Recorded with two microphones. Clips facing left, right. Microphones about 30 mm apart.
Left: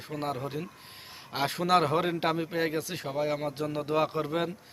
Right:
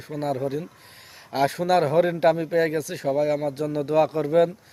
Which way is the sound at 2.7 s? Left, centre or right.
Left.